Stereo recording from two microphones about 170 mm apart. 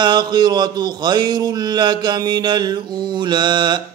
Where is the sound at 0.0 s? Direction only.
25° right (ahead or behind).